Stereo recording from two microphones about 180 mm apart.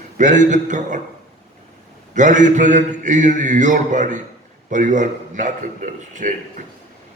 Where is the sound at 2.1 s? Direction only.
45° right (ahead or behind).